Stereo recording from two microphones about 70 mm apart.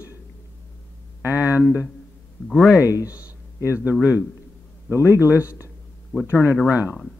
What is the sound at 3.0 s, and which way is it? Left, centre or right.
Speech, centre.